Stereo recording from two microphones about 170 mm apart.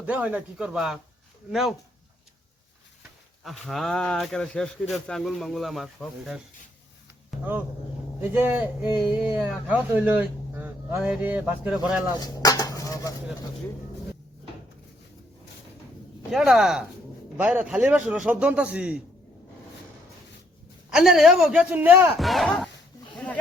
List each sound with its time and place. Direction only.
0.0 s speech: 10° right (ahead or behind)
3.4 s speech: centre (ahead or behind)
8.2 s speech: 10° right (ahead or behind)
12.1 s dishes: 20° left (ahead or behind)
16.3 s speech: 5° right (ahead or behind)
20.9 s speech: 5° right (ahead or behind)
22.2 s a sound: centre (ahead or behind)